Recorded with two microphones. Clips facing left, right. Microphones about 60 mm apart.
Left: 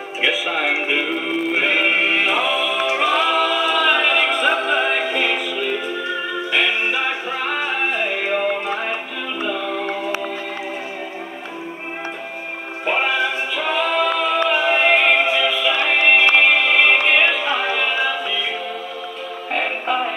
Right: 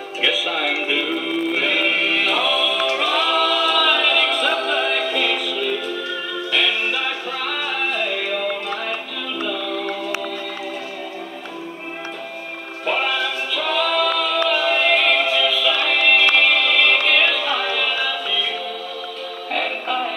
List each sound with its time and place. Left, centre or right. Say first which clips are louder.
0.2 s music: left 1 dB; left
12.8 s music: left 2 dB; left
19.5 s music: left 2 dB; left